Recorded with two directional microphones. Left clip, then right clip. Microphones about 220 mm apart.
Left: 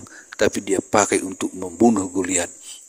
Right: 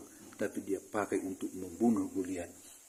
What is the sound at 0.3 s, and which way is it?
A man's voice, 50° left (ahead or behind).